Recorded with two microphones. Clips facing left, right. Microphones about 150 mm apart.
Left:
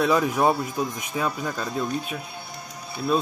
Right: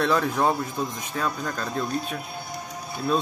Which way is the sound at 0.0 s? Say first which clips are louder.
Left 2 dB; 10° left (ahead or behind).